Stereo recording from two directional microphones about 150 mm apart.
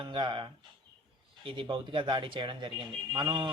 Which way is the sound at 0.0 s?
35° right (ahead or behind).